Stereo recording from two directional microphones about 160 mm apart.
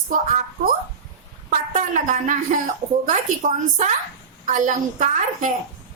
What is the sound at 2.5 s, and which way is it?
A woman's voice, 50° right (ahead or behind).